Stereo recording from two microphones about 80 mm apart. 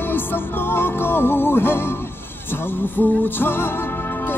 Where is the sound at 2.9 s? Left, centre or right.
Left.